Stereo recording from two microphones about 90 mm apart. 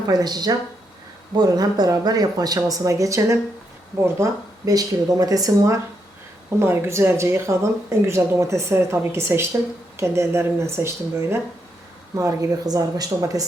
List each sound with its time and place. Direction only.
0.1 s speech: 45° right (ahead or behind)